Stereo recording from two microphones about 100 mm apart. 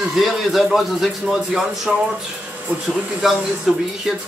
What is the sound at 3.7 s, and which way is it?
Speech, 5° right (ahead or behind).